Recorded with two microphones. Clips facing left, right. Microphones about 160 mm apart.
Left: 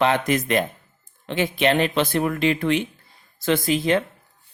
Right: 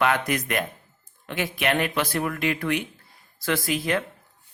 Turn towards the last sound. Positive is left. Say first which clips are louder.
# left 5 dB
turn(degrees=25)  # may be behind; listen again after turning